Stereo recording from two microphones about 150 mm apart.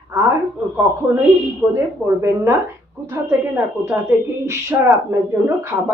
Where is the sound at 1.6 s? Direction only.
10° right (ahead or behind).